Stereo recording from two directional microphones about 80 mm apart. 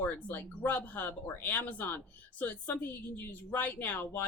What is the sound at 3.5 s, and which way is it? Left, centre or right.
Speech, left.